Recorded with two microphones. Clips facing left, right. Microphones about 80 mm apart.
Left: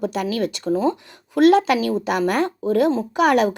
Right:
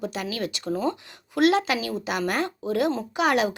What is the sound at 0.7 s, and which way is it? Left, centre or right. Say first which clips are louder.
Speech: left 6 dB; left.